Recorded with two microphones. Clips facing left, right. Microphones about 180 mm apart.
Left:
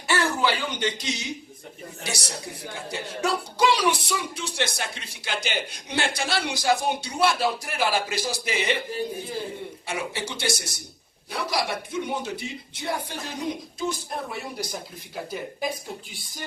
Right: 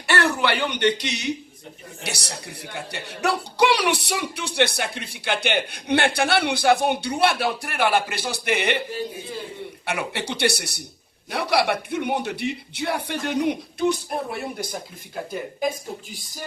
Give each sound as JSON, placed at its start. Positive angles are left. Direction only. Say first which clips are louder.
{"t": 0.1, "sound": "a woman's voice", "louder": "right 2 dB", "side_deg": -65}
{"t": 9.8, "sound": "a woman's voice", "louder": "right 4 dB", "side_deg": -65}